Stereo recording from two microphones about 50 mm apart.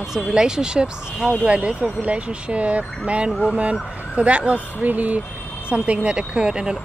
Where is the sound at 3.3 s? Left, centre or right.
Centre.